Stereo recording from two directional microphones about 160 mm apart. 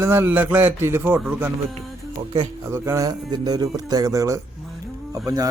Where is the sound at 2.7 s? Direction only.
15° right (ahead or behind).